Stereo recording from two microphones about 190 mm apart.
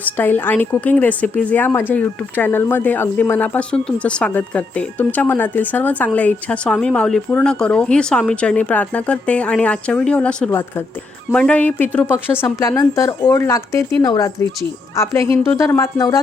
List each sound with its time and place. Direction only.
0.0 s a woman's voice: 10° left (ahead or behind)